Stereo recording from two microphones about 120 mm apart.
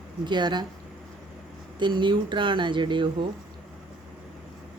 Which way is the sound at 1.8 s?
40° right (ahead or behind).